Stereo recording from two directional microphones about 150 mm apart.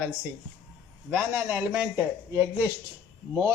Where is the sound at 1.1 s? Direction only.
10° right (ahead or behind).